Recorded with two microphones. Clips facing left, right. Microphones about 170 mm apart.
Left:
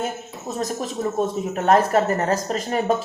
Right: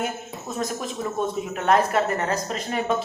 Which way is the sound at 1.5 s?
40° left (ahead or behind).